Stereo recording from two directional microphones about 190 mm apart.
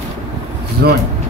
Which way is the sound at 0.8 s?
65° right (ahead or behind).